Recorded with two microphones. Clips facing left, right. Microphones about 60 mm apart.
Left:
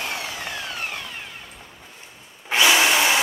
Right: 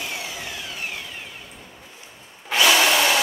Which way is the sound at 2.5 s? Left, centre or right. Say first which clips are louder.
Even; centre.